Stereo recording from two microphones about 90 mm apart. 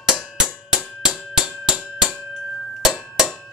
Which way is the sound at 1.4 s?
5° right (ahead or behind).